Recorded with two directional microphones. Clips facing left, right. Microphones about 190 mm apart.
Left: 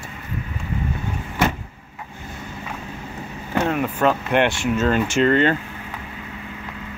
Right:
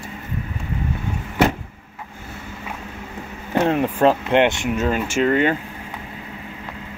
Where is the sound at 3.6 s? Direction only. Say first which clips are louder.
Right 3 dB; 30° right (ahead or behind); by 5.6 s 10° right (ahead or behind).